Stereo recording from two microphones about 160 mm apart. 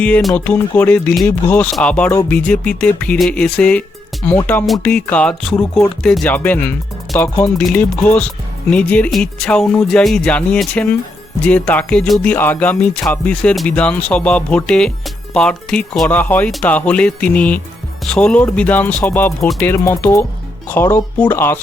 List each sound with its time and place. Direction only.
0.0 s speech: 5° left (ahead or behind)